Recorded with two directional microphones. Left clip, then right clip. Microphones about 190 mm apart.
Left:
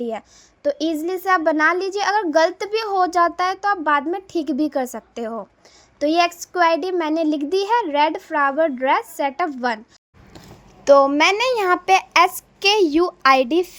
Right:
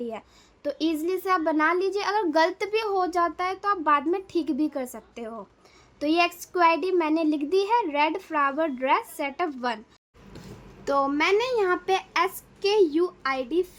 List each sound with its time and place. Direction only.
0.0 s a woman's voice: 20° left (ahead or behind)
10.8 s a child's voice: 35° left (ahead or behind)